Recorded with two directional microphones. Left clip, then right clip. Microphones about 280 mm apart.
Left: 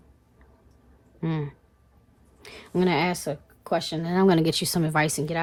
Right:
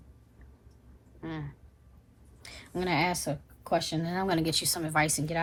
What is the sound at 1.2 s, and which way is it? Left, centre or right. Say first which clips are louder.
Speech: left 8 dB; left.